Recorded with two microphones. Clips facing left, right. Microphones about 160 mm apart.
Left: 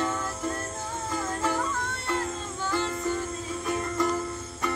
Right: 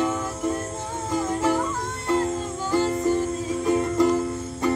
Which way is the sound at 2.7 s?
35° right (ahead or behind).